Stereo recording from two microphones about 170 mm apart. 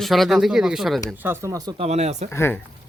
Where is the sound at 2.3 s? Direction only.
15° left (ahead or behind).